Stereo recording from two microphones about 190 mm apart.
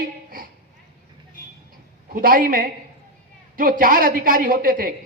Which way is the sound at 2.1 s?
45° right (ahead or behind).